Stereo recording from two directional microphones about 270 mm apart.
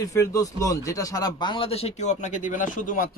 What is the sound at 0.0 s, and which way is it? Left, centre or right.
Speech, centre.